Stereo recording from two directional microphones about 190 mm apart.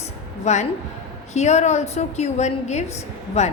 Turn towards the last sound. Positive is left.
turn(degrees=35)  # may be behind; listen again after turning